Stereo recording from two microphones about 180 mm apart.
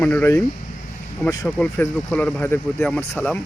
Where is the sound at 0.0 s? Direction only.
10° left (ahead or behind).